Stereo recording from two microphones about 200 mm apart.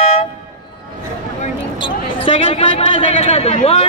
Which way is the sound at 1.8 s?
25° left (ahead or behind).